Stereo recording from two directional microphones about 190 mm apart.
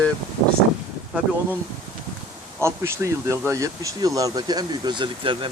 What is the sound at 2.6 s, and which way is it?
Speech, 15° right (ahead or behind).